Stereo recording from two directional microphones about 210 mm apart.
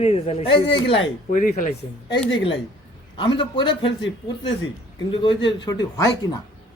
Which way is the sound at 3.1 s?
25° left (ahead or behind).